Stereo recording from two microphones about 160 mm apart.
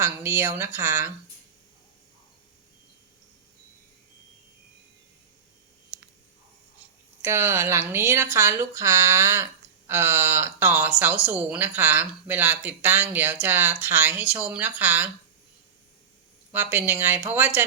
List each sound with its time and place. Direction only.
0.0 s speech: 15° right (ahead or behind)
5.9 s a sound: 10° right (ahead or behind)
7.2 s speech: 15° right (ahead or behind)
16.5 s speech: 10° right (ahead or behind)